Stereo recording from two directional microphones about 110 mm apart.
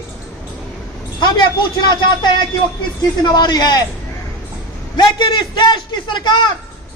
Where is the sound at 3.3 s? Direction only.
40° left (ahead or behind).